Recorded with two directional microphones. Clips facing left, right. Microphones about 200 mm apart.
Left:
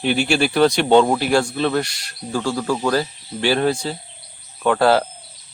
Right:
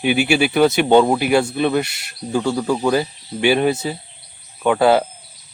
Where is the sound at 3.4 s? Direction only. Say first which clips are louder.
Right 2 dB; 10° right (ahead or behind).